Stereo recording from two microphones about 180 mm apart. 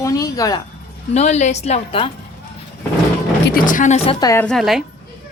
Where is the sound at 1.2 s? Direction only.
40° left (ahead or behind).